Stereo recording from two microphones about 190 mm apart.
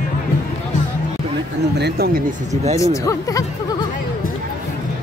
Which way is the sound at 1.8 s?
55° right (ahead or behind).